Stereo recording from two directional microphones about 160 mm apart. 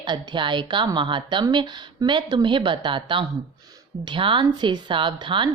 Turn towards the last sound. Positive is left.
turn(degrees=-30)  # may be behind; listen again after turning